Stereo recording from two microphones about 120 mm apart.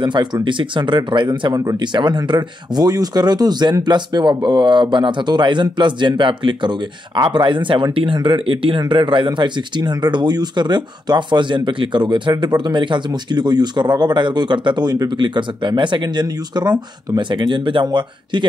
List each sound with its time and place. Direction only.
0.0 s speech: 40° right (ahead or behind)